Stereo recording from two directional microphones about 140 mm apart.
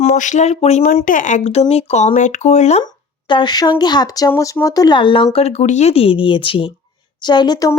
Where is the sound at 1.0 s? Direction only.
70° left (ahead or behind).